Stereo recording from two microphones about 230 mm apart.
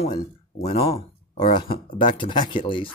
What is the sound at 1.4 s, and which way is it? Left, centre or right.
Speech, left.